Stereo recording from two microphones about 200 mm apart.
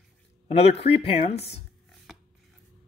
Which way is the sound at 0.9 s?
30° left (ahead or behind).